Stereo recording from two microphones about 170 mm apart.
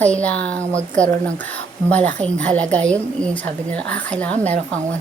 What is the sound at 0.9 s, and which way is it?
A woman's voice, 10° left (ahead or behind).